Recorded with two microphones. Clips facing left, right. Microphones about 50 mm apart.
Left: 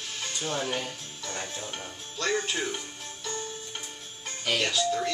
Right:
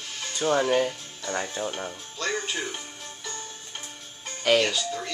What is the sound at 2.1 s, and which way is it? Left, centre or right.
Speech, centre.